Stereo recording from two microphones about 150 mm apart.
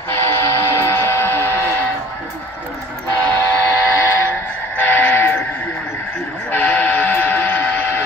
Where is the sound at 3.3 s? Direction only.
15° left (ahead or behind).